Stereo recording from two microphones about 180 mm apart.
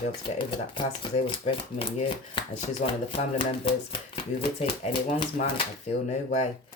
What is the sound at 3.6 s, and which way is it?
Speech, 30° left (ahead or behind).